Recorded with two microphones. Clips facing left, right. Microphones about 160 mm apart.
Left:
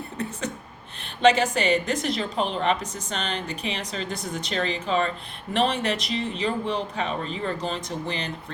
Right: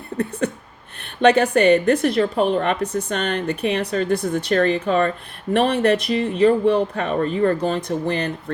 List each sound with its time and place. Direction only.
0.2 s a woman's voice: 55° right (ahead or behind)